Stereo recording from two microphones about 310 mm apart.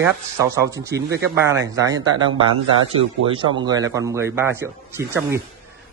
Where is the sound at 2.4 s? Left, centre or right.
Right.